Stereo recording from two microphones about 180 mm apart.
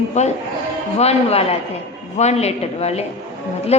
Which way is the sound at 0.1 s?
40° left (ahead or behind).